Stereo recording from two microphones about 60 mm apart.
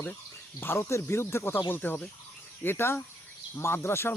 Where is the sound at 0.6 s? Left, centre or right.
Left.